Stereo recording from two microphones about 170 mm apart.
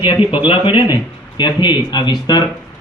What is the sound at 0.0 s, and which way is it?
A man's voice, 30° left (ahead or behind).